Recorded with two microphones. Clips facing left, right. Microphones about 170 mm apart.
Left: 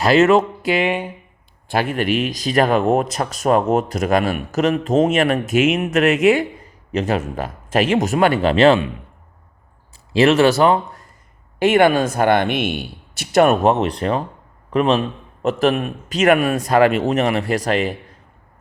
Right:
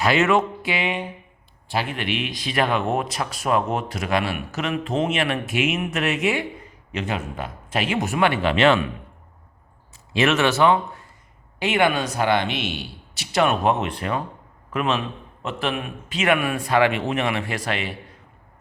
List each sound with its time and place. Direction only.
0.0 s a man's voice: 40° left (ahead or behind)
10.1 s a man's voice: 35° left (ahead or behind)